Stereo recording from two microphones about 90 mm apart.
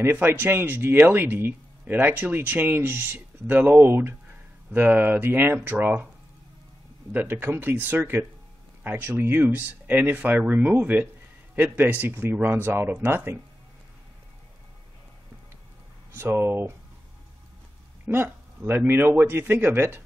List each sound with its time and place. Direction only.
0.0 s speech: 25° right (ahead or behind)
7.1 s speech: 20° right (ahead or behind)
16.1 s speech: 25° right (ahead or behind)
18.0 s speech: 25° right (ahead or behind)